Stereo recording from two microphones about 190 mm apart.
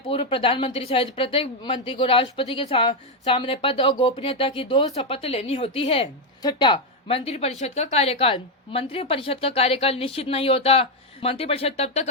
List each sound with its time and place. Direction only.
0.1 s a woman's voice: 30° left (ahead or behind)